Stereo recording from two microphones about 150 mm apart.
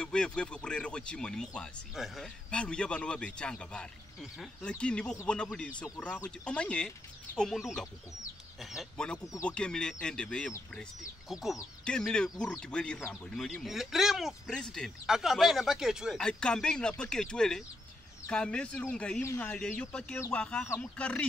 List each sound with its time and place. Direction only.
0.0 s speech: 5° left (ahead or behind)
19.2 s speech: 20° left (ahead or behind)
19.5 s speech: 5° left (ahead or behind)